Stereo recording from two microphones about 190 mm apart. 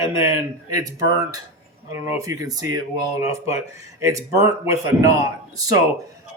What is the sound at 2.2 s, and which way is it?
Speech, 20° right (ahead or behind).